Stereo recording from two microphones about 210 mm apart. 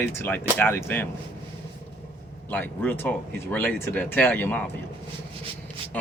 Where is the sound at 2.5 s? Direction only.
10° left (ahead or behind).